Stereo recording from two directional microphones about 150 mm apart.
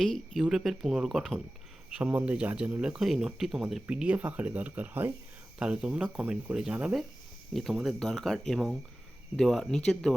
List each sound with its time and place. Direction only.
0.0 s speech: 5° left (ahead or behind)